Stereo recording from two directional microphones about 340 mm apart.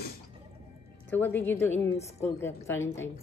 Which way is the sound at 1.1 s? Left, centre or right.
Centre.